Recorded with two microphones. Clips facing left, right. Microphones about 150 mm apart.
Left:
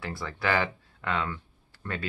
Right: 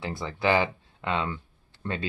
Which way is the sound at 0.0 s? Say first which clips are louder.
Right 4 dB; 20° right (ahead or behind).